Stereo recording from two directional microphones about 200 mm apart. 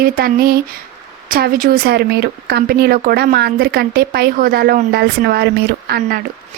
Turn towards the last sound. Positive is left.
turn(degrees=-50)  # may be behind; listen again after turning